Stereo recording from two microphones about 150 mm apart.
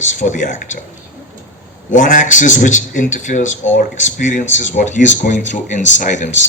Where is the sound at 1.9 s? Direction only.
60° left (ahead or behind).